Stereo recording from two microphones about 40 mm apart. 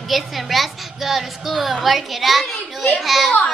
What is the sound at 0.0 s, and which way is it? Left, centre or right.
A woman's voice, centre.